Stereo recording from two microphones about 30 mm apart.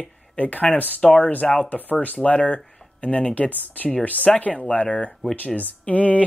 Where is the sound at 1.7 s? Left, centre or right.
Left.